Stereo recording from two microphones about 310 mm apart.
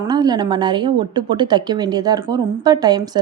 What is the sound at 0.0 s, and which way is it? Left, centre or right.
Speech, centre.